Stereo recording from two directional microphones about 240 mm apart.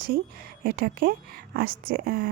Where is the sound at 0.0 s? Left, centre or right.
Right.